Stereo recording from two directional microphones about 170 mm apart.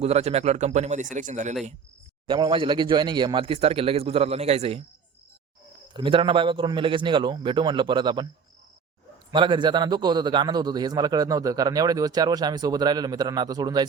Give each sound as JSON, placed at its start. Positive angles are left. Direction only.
{"t": 0.0, "sound": "a man's voice", "side_deg": -40}
{"t": 2.2, "sound": "a man's voice", "side_deg": -30}
{"t": 5.9, "sound": "a man's voice", "side_deg": -30}
{"t": 9.3, "sound": "a man's voice", "side_deg": -25}